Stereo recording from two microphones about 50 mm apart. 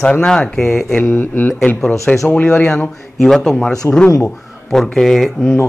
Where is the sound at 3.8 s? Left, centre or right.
Left.